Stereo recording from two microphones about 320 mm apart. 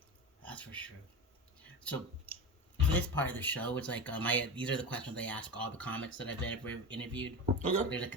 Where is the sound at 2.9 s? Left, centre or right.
Centre.